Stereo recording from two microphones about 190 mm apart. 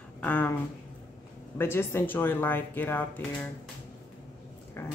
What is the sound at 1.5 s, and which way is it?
Speech, 10° left (ahead or behind).